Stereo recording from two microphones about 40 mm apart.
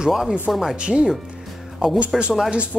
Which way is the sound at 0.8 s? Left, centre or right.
Right.